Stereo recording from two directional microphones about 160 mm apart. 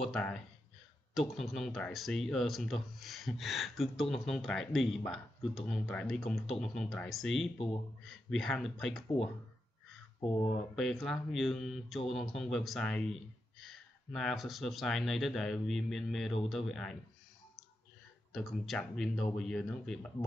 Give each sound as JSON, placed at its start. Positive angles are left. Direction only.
{"t": 0.0, "sound": "speech", "side_deg": 5}
{"t": 10.2, "sound": "speech", "side_deg": 30}
{"t": 10.8, "sound": "speech", "side_deg": 0}
{"t": 18.3, "sound": "speech", "side_deg": 0}